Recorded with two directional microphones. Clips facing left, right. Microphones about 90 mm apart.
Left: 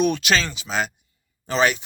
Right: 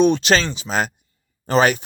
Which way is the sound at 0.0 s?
30° right (ahead or behind).